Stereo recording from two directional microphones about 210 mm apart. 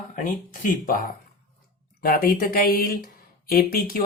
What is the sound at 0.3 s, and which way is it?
Speech, 40° left (ahead or behind).